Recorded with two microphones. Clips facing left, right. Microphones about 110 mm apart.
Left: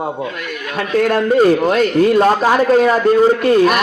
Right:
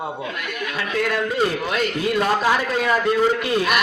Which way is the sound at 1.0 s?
50° left (ahead or behind).